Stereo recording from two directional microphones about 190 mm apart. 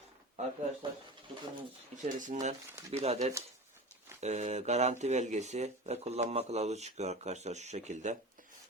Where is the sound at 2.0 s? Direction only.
40° right (ahead or behind).